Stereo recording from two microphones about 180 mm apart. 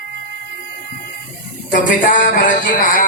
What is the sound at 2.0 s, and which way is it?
A man's voice, 45° left (ahead or behind).